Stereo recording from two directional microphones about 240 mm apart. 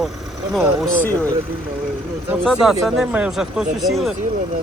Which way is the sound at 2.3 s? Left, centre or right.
Centre.